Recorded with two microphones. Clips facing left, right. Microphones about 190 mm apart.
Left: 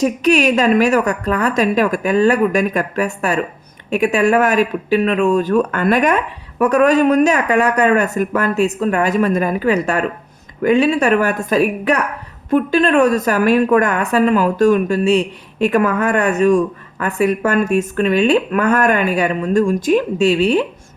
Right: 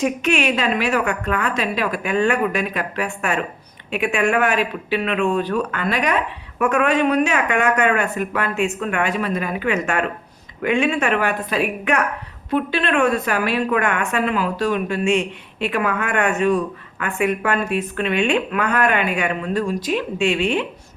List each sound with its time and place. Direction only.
0.0 s a woman's voice: 40° left (ahead or behind)
6.6 s a woman's voice: 40° left (ahead or behind)